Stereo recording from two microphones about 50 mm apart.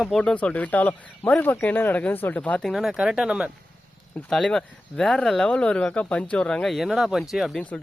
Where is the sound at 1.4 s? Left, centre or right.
Left.